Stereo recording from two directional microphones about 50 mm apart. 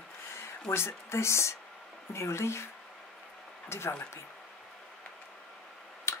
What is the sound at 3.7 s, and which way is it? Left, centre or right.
Speech, left.